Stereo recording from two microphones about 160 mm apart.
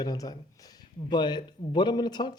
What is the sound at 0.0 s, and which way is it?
Speech, 25° left (ahead or behind).